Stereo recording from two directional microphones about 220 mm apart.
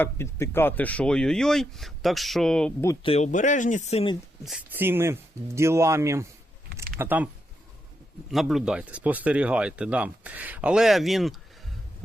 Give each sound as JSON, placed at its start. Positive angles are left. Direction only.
{"t": 0.0, "sound": "speech", "side_deg": 10}
{"t": 2.9, "sound": "speech", "side_deg": 25}
{"t": 4.4, "sound": "speech", "side_deg": -5}
{"t": 8.3, "sound": "speech", "side_deg": 0}